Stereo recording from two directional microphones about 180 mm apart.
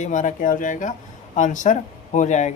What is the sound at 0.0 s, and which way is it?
Speech, 45° left (ahead or behind).